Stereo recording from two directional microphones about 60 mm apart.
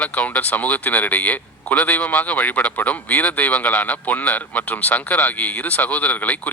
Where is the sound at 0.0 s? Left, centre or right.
Left.